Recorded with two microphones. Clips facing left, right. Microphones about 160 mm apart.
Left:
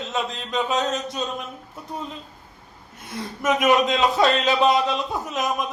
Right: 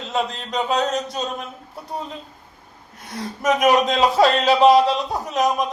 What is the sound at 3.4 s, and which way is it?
A man's voice, 40° right (ahead or behind).